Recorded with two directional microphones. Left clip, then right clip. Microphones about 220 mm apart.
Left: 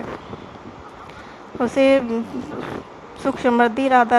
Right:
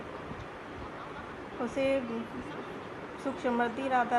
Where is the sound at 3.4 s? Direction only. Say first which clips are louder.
Left 14 dB; 55° left (ahead or behind).